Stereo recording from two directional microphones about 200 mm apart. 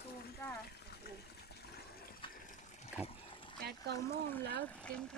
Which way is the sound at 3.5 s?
55° right (ahead or behind).